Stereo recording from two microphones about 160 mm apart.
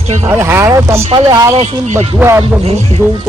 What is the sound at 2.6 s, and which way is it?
Speech, 40° right (ahead or behind).